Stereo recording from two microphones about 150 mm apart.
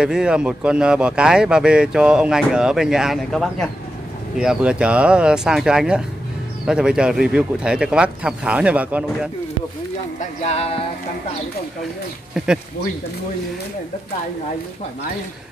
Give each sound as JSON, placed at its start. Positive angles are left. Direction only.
{"t": 0.0, "sound": "speech", "side_deg": -5}
{"t": 10.4, "sound": "music", "side_deg": 45}
{"t": 12.4, "sound": "speech", "side_deg": -5}